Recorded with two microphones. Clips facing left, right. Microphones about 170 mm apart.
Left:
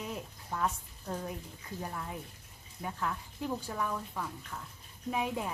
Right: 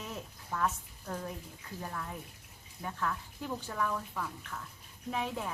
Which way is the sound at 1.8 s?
15° left (ahead or behind).